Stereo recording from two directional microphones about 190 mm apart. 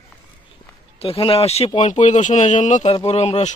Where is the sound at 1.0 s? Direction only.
30° left (ahead or behind).